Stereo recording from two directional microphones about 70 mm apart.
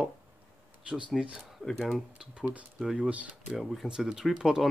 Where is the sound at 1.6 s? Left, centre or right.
Centre.